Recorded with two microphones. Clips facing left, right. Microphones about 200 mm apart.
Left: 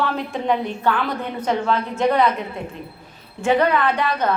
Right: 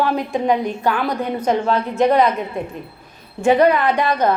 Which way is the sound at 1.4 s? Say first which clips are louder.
Right 2 dB; 40° right (ahead or behind).